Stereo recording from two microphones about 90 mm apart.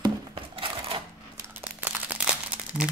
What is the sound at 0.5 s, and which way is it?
Cash register, 90° right.